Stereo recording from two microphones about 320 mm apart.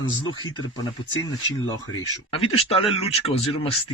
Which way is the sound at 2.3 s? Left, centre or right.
Centre.